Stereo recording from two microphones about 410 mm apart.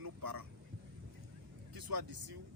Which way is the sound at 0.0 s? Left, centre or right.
Right.